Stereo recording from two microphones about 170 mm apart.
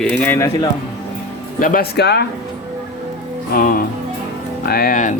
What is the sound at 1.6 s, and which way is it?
Speech, 55° left (ahead or behind).